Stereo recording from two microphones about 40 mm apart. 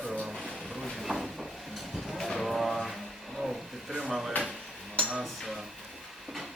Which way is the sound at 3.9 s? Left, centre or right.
Right.